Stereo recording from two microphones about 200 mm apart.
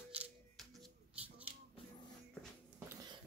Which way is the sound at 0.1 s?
5° right (ahead or behind).